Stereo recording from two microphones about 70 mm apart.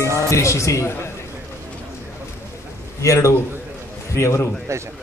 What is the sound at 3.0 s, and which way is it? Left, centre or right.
A man's voice, left.